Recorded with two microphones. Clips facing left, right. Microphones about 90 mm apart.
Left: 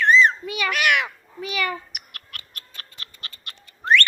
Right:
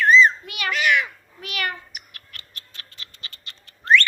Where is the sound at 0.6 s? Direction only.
65° left (ahead or behind).